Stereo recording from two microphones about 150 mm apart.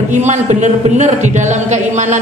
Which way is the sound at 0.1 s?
50° right (ahead or behind).